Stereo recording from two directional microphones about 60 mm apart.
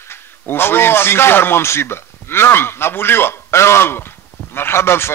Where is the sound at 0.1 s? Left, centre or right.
Left.